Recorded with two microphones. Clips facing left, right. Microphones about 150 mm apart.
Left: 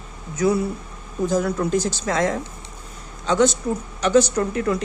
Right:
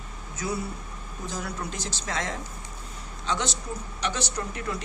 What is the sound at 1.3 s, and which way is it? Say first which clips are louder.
A woman's voice: left 13 dB; 50° left (ahead or behind).